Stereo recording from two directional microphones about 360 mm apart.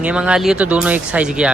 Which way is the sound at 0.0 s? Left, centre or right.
Centre.